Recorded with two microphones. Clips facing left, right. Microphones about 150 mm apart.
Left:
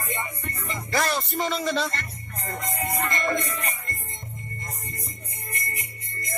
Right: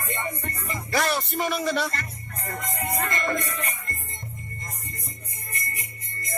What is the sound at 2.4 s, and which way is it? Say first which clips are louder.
Music: left 1 dB; 25° left (ahead or behind).